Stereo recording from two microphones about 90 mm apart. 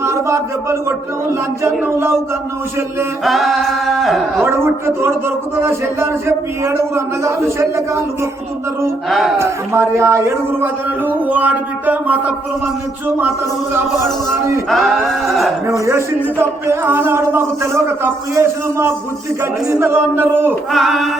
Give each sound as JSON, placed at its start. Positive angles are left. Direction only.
{"t": 0.0, "sound": "a man's voice", "side_deg": -30}
{"t": 3.2, "sound": "singing", "side_deg": 0}
{"t": 4.4, "sound": "a man's voice", "side_deg": -30}
{"t": 9.0, "sound": "singing", "side_deg": 0}
{"t": 9.4, "sound": "a man's voice", "side_deg": -30}
{"t": 10.6, "sound": "a man's voice", "side_deg": -20}
{"t": 14.7, "sound": "singing", "side_deg": 0}
{"t": 15.9, "sound": "a man's voice", "side_deg": -30}
{"t": 20.7, "sound": "singing", "side_deg": 0}